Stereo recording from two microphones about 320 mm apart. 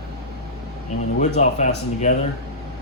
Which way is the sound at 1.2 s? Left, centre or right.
Left.